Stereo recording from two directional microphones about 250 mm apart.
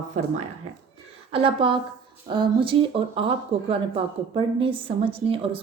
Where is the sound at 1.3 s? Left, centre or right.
Right.